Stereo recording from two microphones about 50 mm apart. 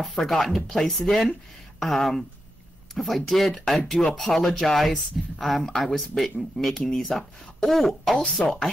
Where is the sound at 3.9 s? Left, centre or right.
Centre.